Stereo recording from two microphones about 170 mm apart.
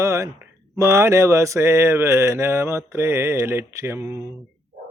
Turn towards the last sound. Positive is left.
turn(degrees=-15)  # may be behind; listen again after turning